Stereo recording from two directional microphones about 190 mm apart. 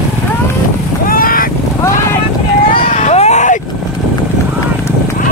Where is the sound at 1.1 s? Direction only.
50° left (ahead or behind).